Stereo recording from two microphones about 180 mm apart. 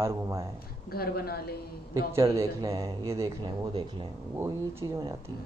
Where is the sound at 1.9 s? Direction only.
15° right (ahead or behind).